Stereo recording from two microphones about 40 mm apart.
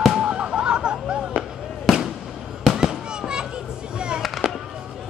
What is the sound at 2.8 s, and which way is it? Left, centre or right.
Fireworks, centre.